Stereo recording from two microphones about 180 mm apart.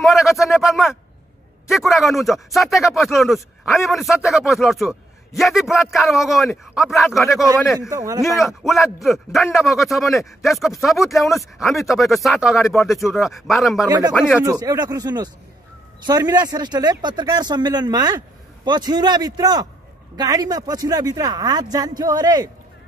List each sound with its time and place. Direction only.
0.0 s a sound: centre (ahead or behind)
1.7 s speech: centre (ahead or behind)
7.9 s a man's voice: 20° right (ahead or behind)
8.4 s speech: centre (ahead or behind)
13.8 s speech: 20° right (ahead or behind)